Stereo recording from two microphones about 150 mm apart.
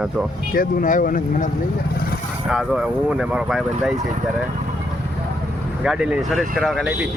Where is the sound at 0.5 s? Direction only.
65° left (ahead or behind).